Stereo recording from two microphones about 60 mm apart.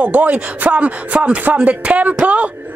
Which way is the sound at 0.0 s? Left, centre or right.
Right.